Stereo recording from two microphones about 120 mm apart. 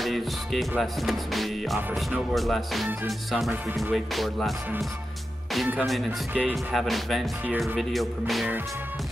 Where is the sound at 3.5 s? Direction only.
20° right (ahead or behind).